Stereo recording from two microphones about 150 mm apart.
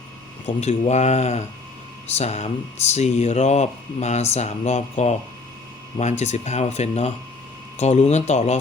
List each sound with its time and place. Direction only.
0.4 s speech: 45° left (ahead or behind)